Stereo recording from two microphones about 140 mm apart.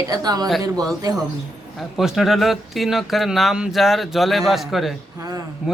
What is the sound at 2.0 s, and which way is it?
Speech, centre (ahead or behind).